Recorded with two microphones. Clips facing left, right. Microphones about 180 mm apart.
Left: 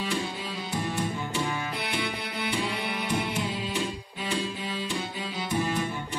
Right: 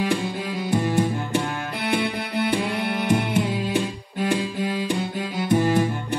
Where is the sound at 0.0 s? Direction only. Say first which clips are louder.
Right 7 dB; 60° right (ahead or behind).